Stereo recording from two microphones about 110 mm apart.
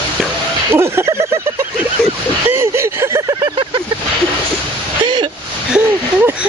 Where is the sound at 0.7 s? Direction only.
20° right (ahead or behind).